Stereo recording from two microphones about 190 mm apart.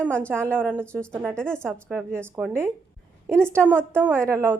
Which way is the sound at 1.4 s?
5° left (ahead or behind).